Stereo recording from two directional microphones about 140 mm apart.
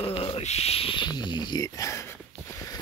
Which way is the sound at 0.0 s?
40° left (ahead or behind).